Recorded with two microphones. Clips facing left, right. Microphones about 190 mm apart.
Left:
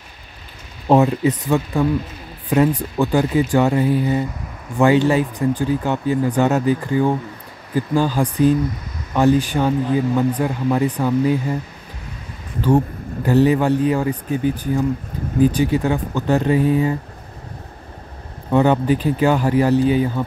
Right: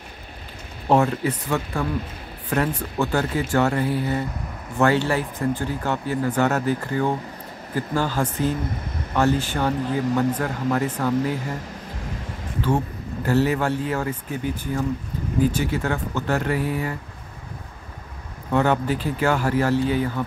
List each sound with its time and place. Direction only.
0.8 s speech: 20° left (ahead or behind)
3.0 s speech: 15° left (ahead or behind)
12.6 s speech: 15° left (ahead or behind)
18.5 s speech: 15° left (ahead or behind)